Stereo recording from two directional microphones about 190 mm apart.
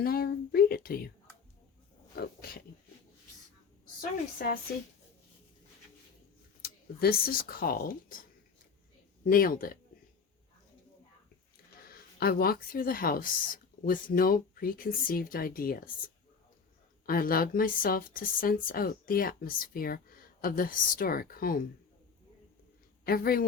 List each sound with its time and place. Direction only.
0.0 s a sound: 50° left (ahead or behind)
4.4 s speech: 50° left (ahead or behind)
6.6 s speech: 55° left (ahead or behind)
9.2 s speech: 50° left (ahead or behind)
11.9 s speech: 50° left (ahead or behind)
17.1 s speech: 50° left (ahead or behind)
23.0 s speech: 50° left (ahead or behind)